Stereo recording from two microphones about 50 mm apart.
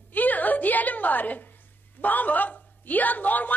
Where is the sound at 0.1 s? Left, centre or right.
Left.